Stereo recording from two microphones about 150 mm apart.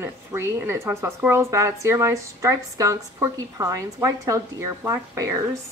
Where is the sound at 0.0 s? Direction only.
15° right (ahead or behind).